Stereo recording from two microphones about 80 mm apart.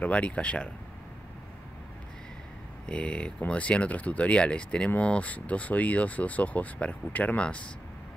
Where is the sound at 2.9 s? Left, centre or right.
Centre.